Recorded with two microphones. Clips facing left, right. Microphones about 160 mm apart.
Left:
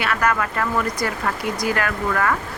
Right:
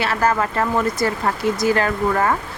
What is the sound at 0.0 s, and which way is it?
Speech, 30° right (ahead or behind).